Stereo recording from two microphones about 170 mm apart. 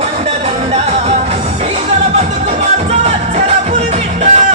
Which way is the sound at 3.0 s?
40° right (ahead or behind).